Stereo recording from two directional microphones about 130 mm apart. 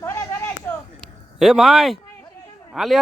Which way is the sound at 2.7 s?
Centre (ahead or behind).